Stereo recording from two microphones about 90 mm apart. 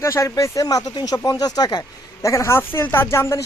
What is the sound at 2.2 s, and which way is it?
Speech, 35° left (ahead or behind).